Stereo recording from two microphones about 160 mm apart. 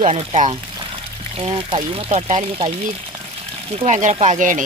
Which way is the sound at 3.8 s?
50° right (ahead or behind).